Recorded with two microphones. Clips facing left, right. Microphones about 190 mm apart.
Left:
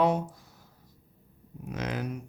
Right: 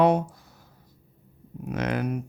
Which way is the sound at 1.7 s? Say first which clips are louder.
Right 6 dB; 60° right (ahead or behind).